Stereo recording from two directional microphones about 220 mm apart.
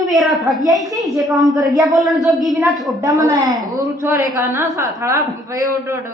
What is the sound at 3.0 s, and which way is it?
A woman's voice, 15° right (ahead or behind).